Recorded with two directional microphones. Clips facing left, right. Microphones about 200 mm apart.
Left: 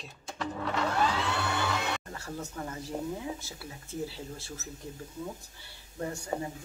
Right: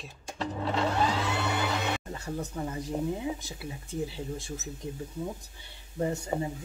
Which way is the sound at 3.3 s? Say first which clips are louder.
Right 4 dB; 15° right (ahead or behind).